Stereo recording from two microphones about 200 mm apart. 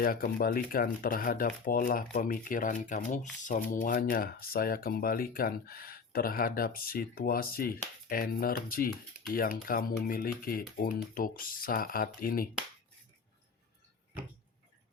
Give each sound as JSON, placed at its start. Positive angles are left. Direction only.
{"t": 0.0, "sound": "speech", "side_deg": 45}